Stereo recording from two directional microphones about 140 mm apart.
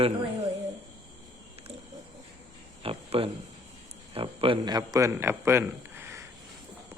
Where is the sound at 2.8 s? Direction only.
40° right (ahead or behind).